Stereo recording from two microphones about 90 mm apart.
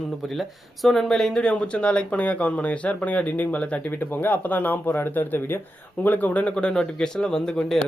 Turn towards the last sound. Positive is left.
turn(degrees=5)  # may be behind; listen again after turning